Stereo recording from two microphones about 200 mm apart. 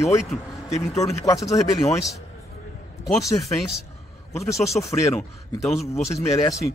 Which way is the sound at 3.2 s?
15° left (ahead or behind).